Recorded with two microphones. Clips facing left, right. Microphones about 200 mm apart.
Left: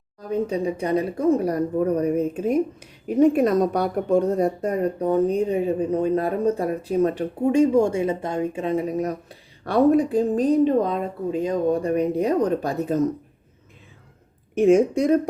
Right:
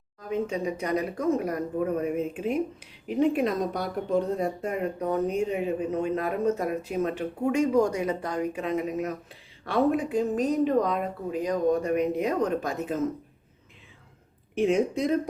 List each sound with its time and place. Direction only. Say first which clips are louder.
0.2 s a woman's voice: left 5 dB; 35° left (ahead or behind)
14.5 s a woman's voice: left 7 dB; 45° left (ahead or behind)